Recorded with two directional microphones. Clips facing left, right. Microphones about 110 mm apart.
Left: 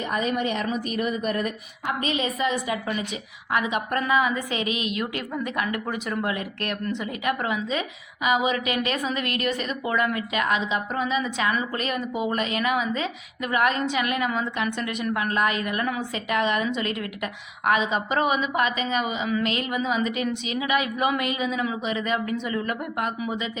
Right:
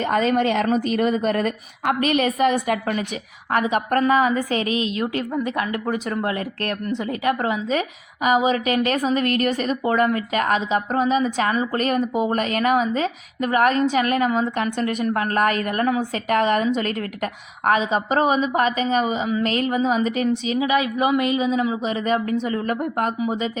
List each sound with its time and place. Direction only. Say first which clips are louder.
0.0 s a woman's voice: right 6 dB; 85° right; by 7.6 s 30° right (ahead or behind)
7.7 s a woman's voice: right 5 dB; 45° right (ahead or behind)